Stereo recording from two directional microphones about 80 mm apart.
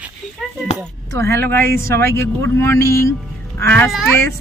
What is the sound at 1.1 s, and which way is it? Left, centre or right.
Speech, left.